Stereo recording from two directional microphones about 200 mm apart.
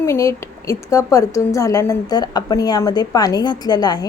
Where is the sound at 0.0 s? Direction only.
15° left (ahead or behind).